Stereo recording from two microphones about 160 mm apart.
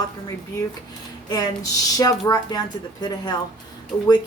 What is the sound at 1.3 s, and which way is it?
A woman's voice, 25° left (ahead or behind).